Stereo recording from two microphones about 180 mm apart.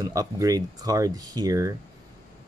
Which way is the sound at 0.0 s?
20° right (ahead or behind).